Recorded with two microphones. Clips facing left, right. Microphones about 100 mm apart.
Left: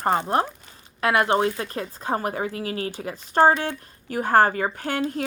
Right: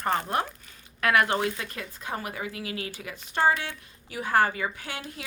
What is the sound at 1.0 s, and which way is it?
Speech, 25° left (ahead or behind).